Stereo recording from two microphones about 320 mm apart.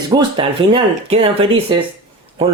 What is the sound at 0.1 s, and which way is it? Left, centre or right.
Speech, centre.